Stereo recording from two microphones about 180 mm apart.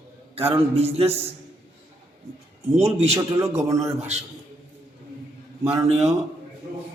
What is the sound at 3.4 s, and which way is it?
Speech, 15° right (ahead or behind).